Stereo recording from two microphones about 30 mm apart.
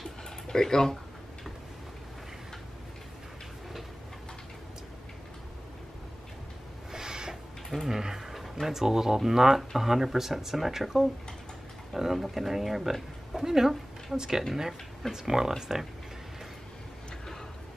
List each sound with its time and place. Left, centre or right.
0.5 s speech: left
6.9 s rub: right
7.7 s speech: centre
8.0 s speech: centre
12.2 s speech: centre